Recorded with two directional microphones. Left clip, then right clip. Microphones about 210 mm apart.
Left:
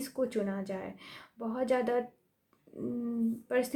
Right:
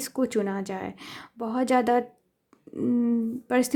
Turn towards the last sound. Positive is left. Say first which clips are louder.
# right 6 dB
turn(degrees=-45)  # may be behind; listen again after turning